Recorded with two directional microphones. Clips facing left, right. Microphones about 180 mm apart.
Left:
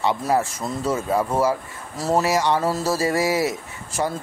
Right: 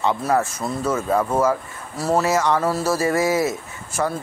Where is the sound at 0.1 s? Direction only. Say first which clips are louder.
Right 1 dB; 15° left (ahead or behind).